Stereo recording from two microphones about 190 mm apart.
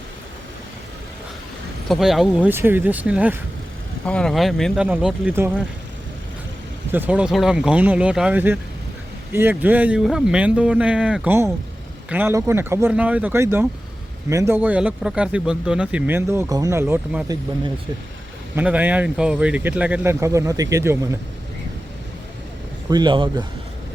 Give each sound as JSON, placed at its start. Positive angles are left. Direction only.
{"t": 1.9, "sound": "speech", "side_deg": 0}
{"t": 4.0, "sound": "speech", "side_deg": 5}
{"t": 6.9, "sound": "speech", "side_deg": -10}
{"t": 18.5, "sound": "speech", "side_deg": -10}
{"t": 22.9, "sound": "speech", "side_deg": -25}